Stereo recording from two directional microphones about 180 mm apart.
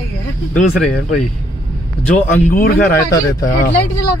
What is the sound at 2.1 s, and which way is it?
Speech, 50° left (ahead or behind).